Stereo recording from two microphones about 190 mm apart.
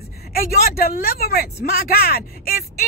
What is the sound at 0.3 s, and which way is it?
Speech, 50° left (ahead or behind).